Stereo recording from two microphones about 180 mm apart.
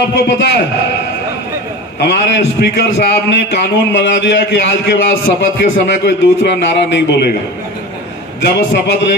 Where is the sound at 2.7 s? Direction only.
70° left (ahead or behind).